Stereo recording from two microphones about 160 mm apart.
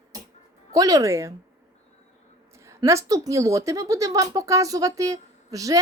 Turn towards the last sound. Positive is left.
turn(degrees=-20)  # may be behind; listen again after turning